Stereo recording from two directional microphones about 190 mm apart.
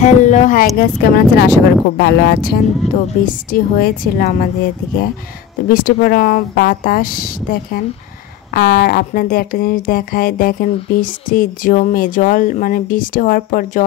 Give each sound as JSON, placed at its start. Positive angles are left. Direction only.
{"t": 0.0, "sound": "speech", "side_deg": 40}
{"t": 0.7, "sound": "speech", "side_deg": 50}
{"t": 2.8, "sound": "speech", "side_deg": 35}
{"t": 3.3, "sound": "speech", "side_deg": 45}
{"t": 5.7, "sound": "speech", "side_deg": 45}